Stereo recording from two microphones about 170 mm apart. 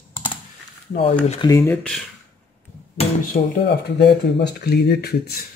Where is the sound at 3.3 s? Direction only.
75° left (ahead or behind).